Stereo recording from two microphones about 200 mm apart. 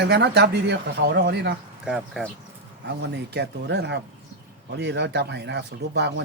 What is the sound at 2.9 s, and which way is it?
Speech, 60° right (ahead or behind).